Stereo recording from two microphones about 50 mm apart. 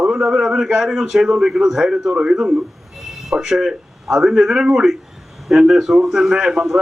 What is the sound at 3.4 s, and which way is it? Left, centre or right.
A man's voice, centre.